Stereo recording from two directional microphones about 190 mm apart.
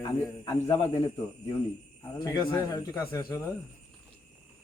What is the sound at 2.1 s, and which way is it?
A man's voice, 20° left (ahead or behind).